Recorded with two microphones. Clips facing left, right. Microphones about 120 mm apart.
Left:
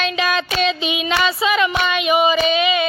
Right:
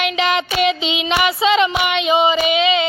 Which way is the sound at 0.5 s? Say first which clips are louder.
Right 2 dB; 20° right (ahead or behind).